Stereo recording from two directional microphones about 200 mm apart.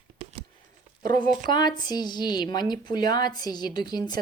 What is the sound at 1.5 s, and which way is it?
A woman's voice, 20° left (ahead or behind).